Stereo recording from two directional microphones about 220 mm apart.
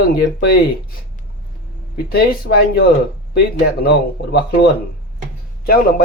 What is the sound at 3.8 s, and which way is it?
Speech, 50° left (ahead or behind).